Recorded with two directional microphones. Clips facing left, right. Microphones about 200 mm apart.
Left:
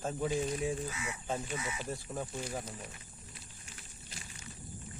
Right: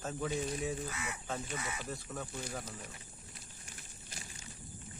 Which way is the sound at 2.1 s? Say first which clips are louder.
Left 4 dB; 25° left (ahead or behind).